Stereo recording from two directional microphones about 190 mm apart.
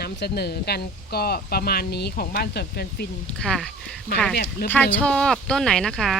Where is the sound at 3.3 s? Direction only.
5° left (ahead or behind).